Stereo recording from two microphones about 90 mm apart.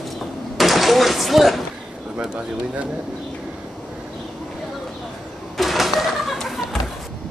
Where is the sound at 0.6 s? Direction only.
Centre (ahead or behind).